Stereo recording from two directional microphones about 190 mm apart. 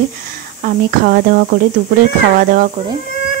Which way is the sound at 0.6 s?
50° right (ahead or behind).